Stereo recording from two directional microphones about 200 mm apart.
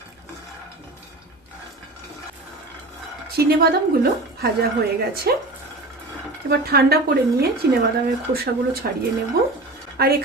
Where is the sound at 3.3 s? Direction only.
50° right (ahead or behind).